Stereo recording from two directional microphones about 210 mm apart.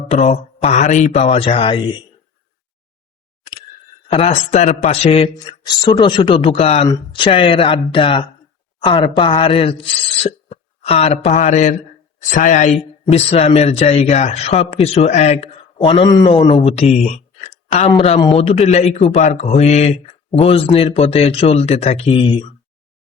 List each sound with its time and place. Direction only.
0.1 s speech: 30° left (ahead or behind)
4.1 s speech: 30° left (ahead or behind)